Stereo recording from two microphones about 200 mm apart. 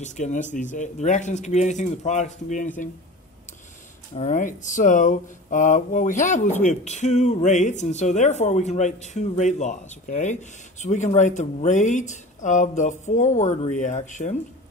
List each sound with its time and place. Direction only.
0.0 s speech: 35° left (ahead or behind)
4.1 s speech: 35° left (ahead or behind)